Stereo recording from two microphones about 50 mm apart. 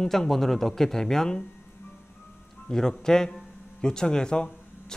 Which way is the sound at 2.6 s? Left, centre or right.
Centre.